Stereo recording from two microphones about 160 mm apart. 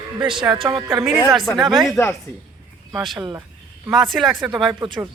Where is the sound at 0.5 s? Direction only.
30° right (ahead or behind).